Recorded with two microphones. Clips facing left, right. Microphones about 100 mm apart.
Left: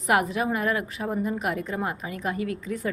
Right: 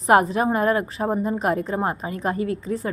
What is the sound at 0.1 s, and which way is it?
A woman's voice, 35° right (ahead or behind).